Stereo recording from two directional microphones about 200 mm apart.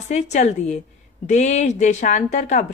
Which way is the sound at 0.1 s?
35° left (ahead or behind).